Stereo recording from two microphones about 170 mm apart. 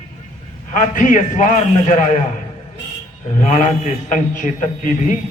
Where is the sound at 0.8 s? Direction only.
50° left (ahead or behind).